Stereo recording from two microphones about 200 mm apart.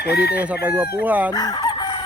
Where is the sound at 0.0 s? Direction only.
55° left (ahead or behind).